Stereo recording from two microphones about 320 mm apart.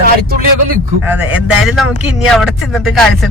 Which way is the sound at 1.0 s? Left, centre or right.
Centre.